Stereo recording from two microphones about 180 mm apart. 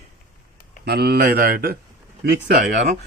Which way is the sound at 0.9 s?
60° right (ahead or behind).